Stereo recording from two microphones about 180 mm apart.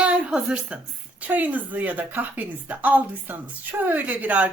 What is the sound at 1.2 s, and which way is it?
Speech, 10° right (ahead or behind).